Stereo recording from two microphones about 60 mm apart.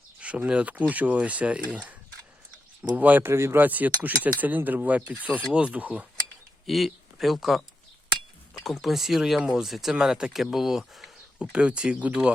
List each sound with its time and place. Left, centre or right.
0.2 s speech: right
3.2 s speech: right
3.6 s speech: right
6.7 s speech: centre
8.6 s speech: centre
11.5 s speech: centre